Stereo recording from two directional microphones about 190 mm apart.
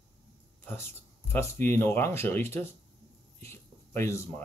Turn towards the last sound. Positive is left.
turn(degrees=15)  # may be behind; listen again after turning